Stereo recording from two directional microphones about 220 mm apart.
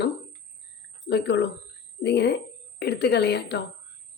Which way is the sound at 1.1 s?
50° left (ahead or behind).